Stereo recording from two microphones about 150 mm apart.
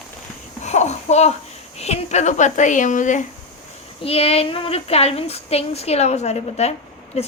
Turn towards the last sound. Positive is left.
turn(degrees=45)  # may be behind; listen again after turning